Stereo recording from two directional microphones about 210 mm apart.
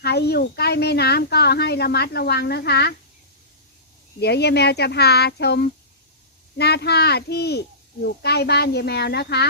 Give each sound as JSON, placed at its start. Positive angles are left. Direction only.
{"t": 0.0, "sound": "speech", "side_deg": 50}
{"t": 4.2, "sound": "speech", "side_deg": 50}